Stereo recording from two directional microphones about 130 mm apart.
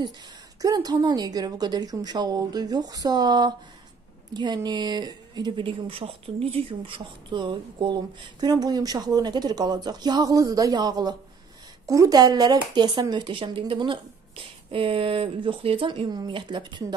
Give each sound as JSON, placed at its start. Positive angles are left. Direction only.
{"t": 0.6, "sound": "speech", "side_deg": -30}